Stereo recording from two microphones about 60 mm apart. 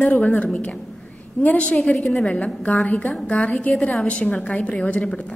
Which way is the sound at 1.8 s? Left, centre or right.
Centre.